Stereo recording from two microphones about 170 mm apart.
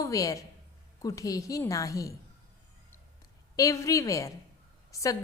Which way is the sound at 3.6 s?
20° left (ahead or behind).